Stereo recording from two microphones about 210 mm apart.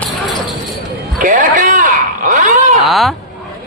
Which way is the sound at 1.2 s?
40° right (ahead or behind).